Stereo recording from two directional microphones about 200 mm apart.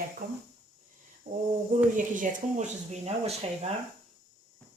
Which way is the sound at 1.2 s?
55° right (ahead or behind).